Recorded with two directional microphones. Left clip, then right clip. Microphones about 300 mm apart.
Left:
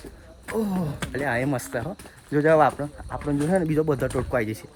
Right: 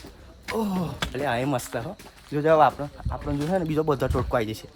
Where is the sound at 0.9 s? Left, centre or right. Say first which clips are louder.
Even; centre.